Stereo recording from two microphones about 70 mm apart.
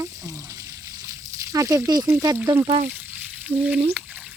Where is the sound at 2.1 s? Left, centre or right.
Right.